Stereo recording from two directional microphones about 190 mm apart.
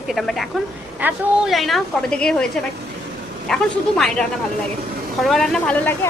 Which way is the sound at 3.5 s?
Centre (ahead or behind).